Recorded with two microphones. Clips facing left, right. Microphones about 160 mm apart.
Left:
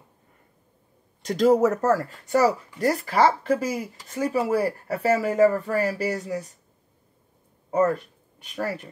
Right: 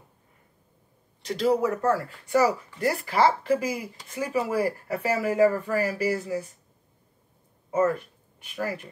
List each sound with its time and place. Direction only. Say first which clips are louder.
1.2 s speech: left 5 dB; 45° left (ahead or behind)
7.7 s speech: left 2 dB; 35° left (ahead or behind)